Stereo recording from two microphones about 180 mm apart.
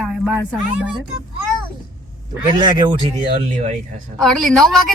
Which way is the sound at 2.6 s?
25° right (ahead or behind).